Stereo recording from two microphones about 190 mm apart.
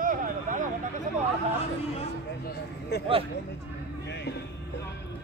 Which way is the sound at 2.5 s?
60° left (ahead or behind).